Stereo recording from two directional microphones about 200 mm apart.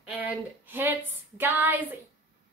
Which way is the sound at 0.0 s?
5° right (ahead or behind).